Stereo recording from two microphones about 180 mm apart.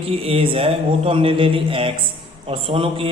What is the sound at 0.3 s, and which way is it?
A man's voice, 30° right (ahead or behind).